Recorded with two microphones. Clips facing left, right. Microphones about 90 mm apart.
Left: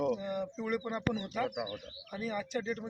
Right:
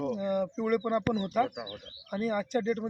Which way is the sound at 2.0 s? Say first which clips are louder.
Right 7 dB; 55° right (ahead or behind).